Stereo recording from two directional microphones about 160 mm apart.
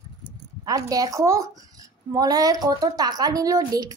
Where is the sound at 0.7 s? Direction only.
20° right (ahead or behind).